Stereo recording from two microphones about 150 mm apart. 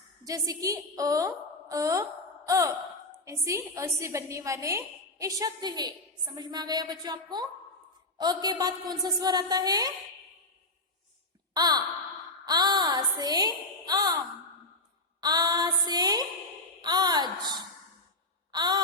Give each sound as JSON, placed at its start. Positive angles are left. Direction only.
{"t": 0.3, "sound": "a woman's voice", "side_deg": -25}
{"t": 11.5, "sound": "sigh", "side_deg": -25}
{"t": 12.5, "sound": "a woman's voice", "side_deg": -25}
{"t": 15.2, "sound": "a woman's voice", "side_deg": -25}
{"t": 18.5, "sound": "a sound", "side_deg": -30}